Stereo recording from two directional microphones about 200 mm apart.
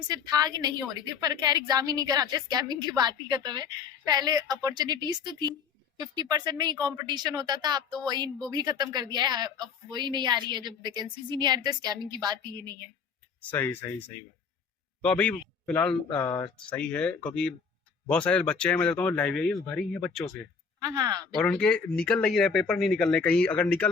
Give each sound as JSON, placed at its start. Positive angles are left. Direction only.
{"t": 0.1, "sound": "speech", "side_deg": -20}
{"t": 13.5, "sound": "speech", "side_deg": 10}
{"t": 15.0, "sound": "speech", "side_deg": 5}
{"t": 20.7, "sound": "speech", "side_deg": -20}
{"t": 21.2, "sound": "speech", "side_deg": 5}